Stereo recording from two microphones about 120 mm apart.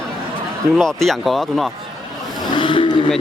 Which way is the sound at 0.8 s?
5° left (ahead or behind).